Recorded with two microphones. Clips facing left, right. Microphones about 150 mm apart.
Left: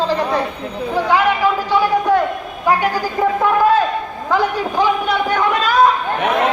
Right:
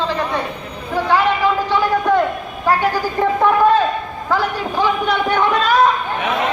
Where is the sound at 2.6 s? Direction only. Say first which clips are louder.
Even; 15° left (ahead or behind).